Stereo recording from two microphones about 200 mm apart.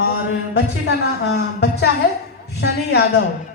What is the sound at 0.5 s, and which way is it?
A woman's voice, 55° left (ahead or behind).